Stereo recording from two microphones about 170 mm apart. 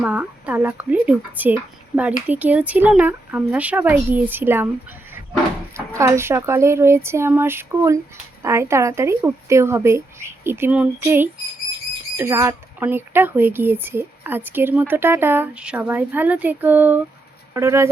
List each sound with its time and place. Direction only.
0.0 s speech: 10° right (ahead or behind)
6.0 s speech: 15° right (ahead or behind)